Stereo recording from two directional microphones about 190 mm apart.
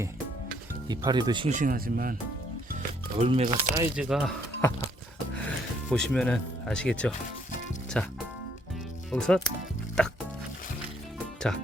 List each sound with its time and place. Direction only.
0.9 s speech: 20° right (ahead or behind)
1.5 s speech: 45° right (ahead or behind)
3.2 s speech: 30° right (ahead or behind)
3.9 s speech: 5° right (ahead or behind)
5.9 s speech: 5° left (ahead or behind)
11.5 s speech: 5° left (ahead or behind)